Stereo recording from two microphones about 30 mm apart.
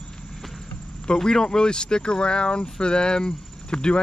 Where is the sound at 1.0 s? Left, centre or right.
Centre.